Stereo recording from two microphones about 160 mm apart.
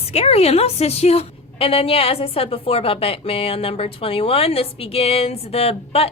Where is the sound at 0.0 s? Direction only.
40° left (ahead or behind).